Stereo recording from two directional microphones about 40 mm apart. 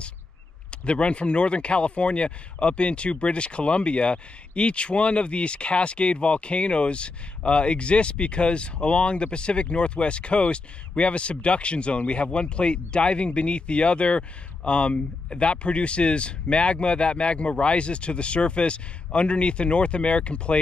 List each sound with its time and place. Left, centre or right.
0.7 s speech: left